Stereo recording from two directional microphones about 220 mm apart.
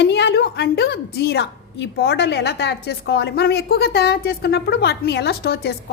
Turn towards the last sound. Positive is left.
turn(degrees=45)  # may be behind; listen again after turning